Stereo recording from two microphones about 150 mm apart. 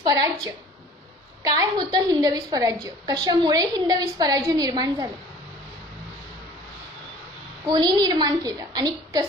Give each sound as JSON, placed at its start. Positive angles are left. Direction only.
{"t": 0.0, "sound": "a woman's voice", "side_deg": -25}
{"t": 1.4, "sound": "a woman's voice", "side_deg": -25}
{"t": 7.6, "sound": "a woman's voice", "side_deg": -30}